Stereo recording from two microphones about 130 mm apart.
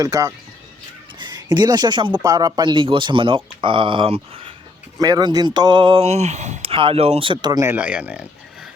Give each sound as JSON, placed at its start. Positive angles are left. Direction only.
{"t": 0.0, "sound": "speech", "side_deg": -25}
{"t": 4.9, "sound": "speech", "side_deg": -30}
{"t": 7.8, "sound": "speech", "side_deg": -10}